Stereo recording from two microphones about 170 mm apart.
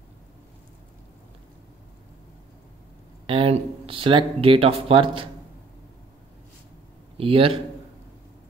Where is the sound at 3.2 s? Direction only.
30° right (ahead or behind).